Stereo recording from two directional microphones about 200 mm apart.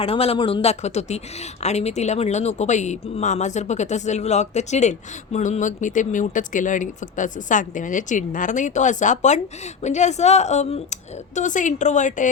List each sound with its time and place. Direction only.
0.0 s a woman's voice: 30° left (ahead or behind)